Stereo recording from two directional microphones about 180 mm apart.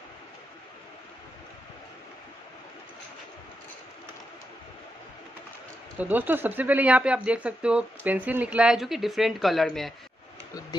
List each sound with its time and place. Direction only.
5.9 s speech: 10° right (ahead or behind)